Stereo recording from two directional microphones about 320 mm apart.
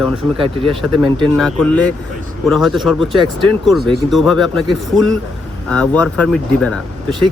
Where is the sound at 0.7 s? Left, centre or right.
Centre.